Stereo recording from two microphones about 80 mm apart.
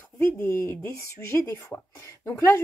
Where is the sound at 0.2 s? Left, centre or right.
Left.